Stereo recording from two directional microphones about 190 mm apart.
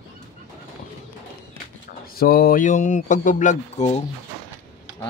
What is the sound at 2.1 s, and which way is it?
Speech, 50° left (ahead or behind).